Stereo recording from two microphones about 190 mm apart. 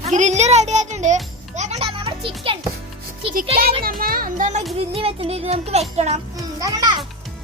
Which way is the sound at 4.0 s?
50° right (ahead or behind).